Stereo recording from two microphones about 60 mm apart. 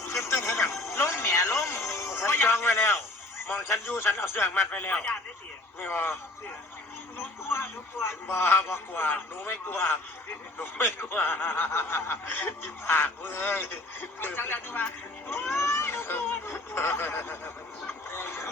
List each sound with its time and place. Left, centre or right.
0.0 s music: left
3.5 s speech: left
5.8 s speech: left
7.4 s a sound: left
8.0 s speech: left